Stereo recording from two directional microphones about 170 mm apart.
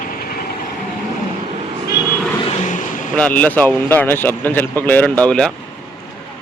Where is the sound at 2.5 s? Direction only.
50° left (ahead or behind).